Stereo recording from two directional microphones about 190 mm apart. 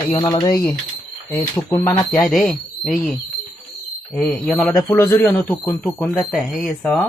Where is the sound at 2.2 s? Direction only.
Centre (ahead or behind).